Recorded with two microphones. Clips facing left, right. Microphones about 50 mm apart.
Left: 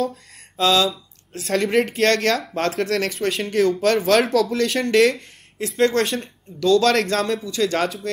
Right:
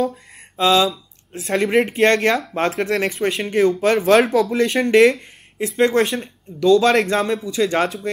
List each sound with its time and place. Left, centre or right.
0.0 s mantra: centre
1.4 s speech: centre